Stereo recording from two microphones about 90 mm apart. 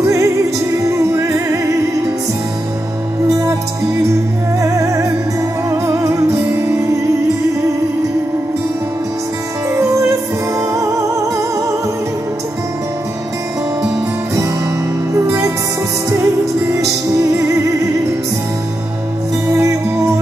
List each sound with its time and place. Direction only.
0.0 s music: 35° right (ahead or behind)
3.3 s music: 40° right (ahead or behind)
4.6 s music: 35° right (ahead or behind)
9.7 s music: 35° right (ahead or behind)
16.1 s music: 35° right (ahead or behind)